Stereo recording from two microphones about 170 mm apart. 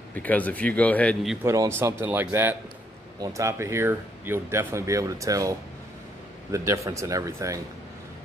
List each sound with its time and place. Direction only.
0.1 s a man's voice: 10° left (ahead or behind)
1.4 s speech: 15° right (ahead or behind)